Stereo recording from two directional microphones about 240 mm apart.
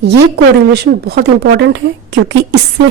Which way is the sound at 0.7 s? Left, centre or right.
Right.